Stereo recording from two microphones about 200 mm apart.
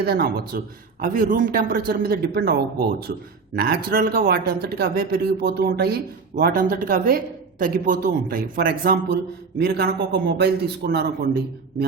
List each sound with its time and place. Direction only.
0.0 s a man's voice: 50° right (ahead or behind)